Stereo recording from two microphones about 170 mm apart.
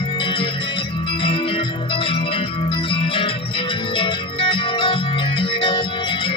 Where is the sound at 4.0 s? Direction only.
30° left (ahead or behind).